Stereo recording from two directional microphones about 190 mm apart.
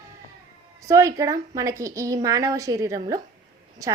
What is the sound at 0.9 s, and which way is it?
Speech, 15° right (ahead or behind).